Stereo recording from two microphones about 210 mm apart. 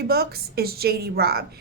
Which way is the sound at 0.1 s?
50° right (ahead or behind).